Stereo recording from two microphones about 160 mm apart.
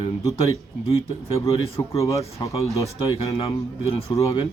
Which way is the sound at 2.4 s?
25° left (ahead or behind).